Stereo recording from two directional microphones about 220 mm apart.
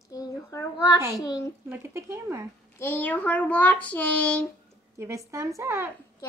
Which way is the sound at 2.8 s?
10° left (ahead or behind).